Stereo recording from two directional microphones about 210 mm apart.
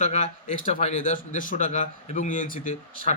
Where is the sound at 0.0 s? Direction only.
35° left (ahead or behind).